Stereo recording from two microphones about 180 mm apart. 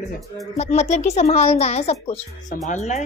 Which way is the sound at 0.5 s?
40° left (ahead or behind).